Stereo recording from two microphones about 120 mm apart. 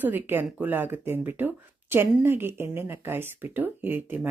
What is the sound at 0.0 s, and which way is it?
Speech, 15° right (ahead or behind).